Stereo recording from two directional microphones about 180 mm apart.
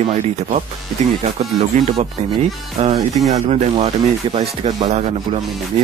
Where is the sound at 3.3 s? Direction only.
35° right (ahead or behind).